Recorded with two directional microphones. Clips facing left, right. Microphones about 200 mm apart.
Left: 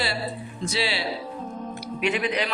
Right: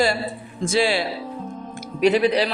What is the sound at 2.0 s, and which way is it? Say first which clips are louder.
Speech: right 8 dB; 35° right (ahead or behind).